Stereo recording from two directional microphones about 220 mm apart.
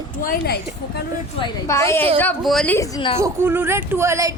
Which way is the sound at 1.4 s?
10° left (ahead or behind).